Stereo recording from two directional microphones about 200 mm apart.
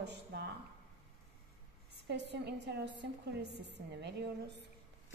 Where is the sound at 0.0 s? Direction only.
55° right (ahead or behind).